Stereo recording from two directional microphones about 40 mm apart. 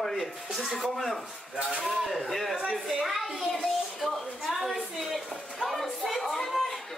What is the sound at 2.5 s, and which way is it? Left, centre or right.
Speech, right.